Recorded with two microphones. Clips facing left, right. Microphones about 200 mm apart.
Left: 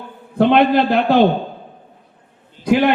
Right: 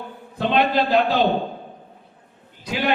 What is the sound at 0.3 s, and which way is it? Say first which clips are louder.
Speech: left 7 dB; 60° left (ahead or behind).